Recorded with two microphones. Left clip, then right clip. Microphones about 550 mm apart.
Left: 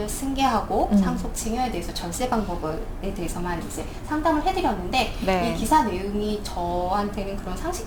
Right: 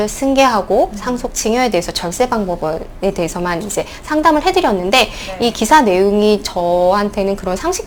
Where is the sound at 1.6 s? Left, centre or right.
Right.